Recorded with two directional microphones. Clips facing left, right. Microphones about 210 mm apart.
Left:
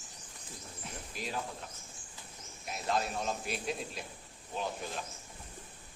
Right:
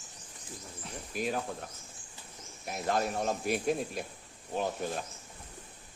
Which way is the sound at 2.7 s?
55° right (ahead or behind).